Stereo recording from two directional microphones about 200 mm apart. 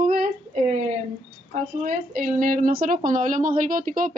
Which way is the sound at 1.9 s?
40° right (ahead or behind).